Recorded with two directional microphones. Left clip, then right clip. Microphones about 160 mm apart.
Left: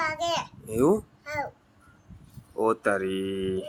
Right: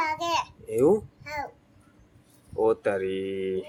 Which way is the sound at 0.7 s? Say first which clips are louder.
Right 2 dB; 20° left (ahead or behind).